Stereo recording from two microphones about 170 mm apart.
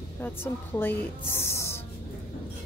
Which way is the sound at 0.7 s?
15° left (ahead or behind).